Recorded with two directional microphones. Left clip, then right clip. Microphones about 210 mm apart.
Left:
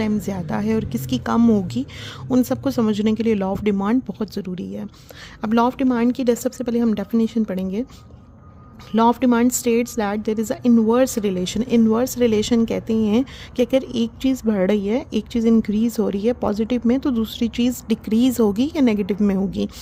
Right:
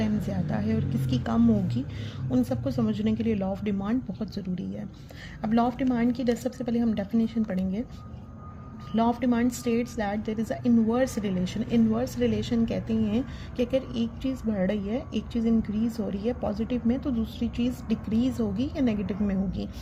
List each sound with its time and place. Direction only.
0.0 s a woman's voice: 35° left (ahead or behind)
8.9 s a woman's voice: 45° left (ahead or behind)